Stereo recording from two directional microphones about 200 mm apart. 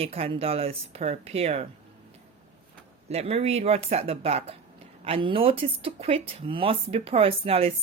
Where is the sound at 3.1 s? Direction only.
30° right (ahead or behind).